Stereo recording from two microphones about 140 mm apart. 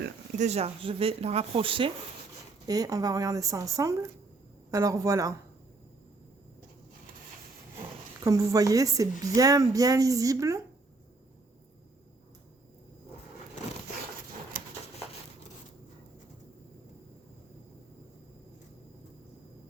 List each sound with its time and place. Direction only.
0.3 s speech: 50° right (ahead or behind)
2.6 s speech: 25° right (ahead or behind)
8.2 s speech: 25° right (ahead or behind)
14.5 s a sound: 90° right